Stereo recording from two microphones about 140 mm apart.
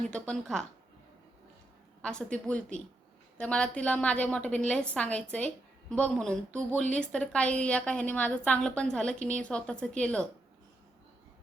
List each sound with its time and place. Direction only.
0.0 s a woman's voice: 5° left (ahead or behind)
2.0 s a woman's voice: 5° left (ahead or behind)